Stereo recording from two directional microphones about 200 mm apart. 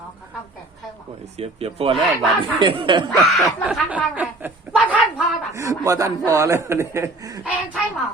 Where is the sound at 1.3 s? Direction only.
30° right (ahead or behind).